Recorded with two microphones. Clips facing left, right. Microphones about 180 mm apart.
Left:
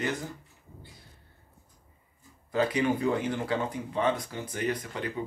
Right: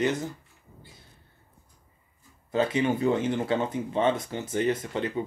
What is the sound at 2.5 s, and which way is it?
Speech, 25° right (ahead or behind).